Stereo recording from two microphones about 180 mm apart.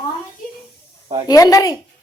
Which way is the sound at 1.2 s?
20° left (ahead or behind).